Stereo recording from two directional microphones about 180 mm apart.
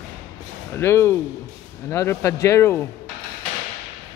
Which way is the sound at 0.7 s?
15° left (ahead or behind).